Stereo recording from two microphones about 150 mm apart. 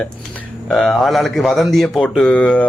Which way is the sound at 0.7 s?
Centre (ahead or behind).